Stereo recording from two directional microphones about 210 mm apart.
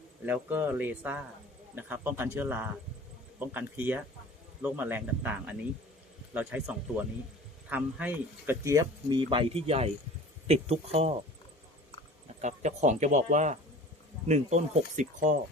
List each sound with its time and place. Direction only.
0.3 s speech: 10° right (ahead or behind); by 11.1 s 30° right (ahead or behind)
12.4 s speech: 35° right (ahead or behind)